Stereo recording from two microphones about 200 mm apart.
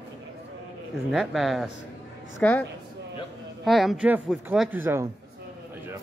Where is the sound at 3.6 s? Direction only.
Centre (ahead or behind).